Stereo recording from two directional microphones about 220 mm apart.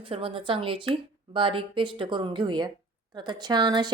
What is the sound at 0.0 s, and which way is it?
Speech, 25° right (ahead or behind).